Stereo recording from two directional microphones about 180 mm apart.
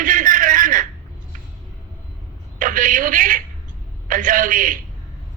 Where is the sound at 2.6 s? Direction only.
45° right (ahead or behind).